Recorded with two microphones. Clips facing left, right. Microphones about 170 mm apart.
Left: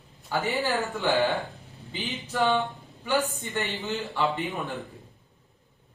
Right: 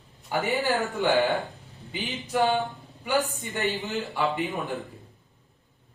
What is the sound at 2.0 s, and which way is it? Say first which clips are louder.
Speech: right 2 dB; 15° right (ahead or behind).